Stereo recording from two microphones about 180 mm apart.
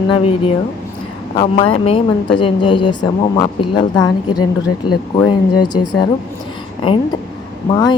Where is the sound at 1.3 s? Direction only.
35° left (ahead or behind).